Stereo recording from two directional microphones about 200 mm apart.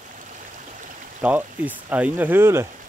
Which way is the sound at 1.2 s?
5° right (ahead or behind).